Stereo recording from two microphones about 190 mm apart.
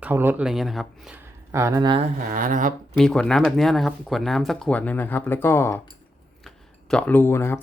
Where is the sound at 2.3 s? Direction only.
45° right (ahead or behind).